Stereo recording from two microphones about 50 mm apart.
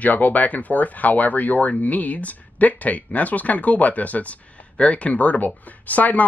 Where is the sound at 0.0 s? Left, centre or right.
Left.